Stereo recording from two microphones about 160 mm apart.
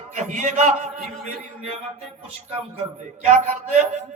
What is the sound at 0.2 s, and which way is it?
Speech, 50° right (ahead or behind).